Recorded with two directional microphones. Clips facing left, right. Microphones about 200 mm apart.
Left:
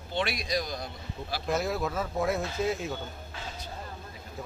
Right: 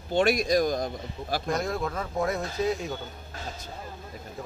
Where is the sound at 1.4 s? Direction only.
5° left (ahead or behind).